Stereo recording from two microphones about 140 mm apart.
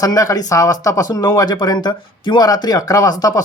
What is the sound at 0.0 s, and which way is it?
Speech, 25° left (ahead or behind).